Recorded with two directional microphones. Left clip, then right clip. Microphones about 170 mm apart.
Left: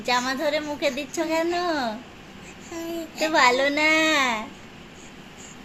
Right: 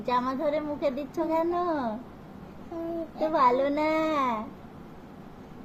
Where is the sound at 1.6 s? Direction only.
35° left (ahead or behind).